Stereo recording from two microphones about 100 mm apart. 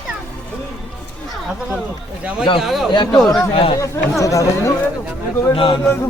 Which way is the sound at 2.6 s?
Centre (ahead or behind).